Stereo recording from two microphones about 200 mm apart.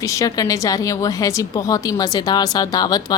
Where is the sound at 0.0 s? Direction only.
15° left (ahead or behind).